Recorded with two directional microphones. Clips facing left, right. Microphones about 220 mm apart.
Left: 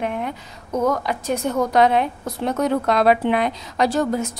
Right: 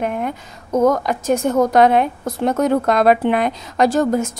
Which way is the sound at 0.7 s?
45° right (ahead or behind).